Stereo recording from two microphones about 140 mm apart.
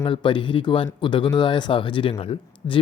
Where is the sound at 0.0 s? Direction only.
35° left (ahead or behind).